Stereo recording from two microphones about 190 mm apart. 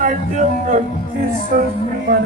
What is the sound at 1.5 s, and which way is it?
Speech, 45° right (ahead or behind).